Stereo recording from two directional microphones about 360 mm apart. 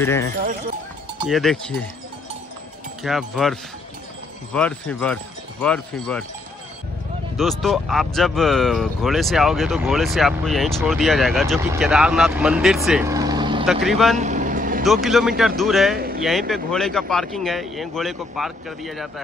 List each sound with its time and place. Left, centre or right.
0.0 s speech: centre
3.0 s speech: centre
4.6 s speech: centre
7.3 s speech: centre
13.7 s speech: centre
14.1 s vehicle: centre
14.9 s speech: centre